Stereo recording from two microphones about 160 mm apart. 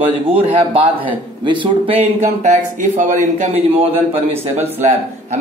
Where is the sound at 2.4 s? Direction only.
50° right (ahead or behind).